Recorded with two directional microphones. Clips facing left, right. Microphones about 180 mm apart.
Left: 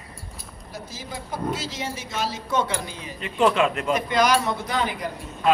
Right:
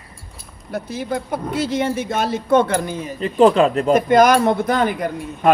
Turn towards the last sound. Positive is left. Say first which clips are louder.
# right 7 dB
turn(degrees=-50)  # may be behind; listen again after turning